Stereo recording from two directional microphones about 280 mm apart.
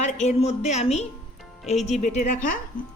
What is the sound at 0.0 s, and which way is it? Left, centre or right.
Speech, left.